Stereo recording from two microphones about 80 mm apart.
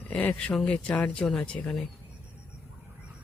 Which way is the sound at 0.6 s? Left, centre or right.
Centre.